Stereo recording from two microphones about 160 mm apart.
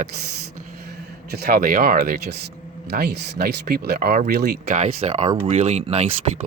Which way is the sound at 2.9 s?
90° right.